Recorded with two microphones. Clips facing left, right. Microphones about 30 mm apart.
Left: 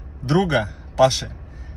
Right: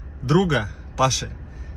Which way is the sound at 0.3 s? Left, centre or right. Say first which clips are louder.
Left 1 dB; left.